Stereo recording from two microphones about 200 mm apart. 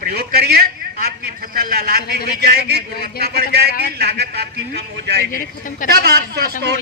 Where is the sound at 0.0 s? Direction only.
50° right (ahead or behind).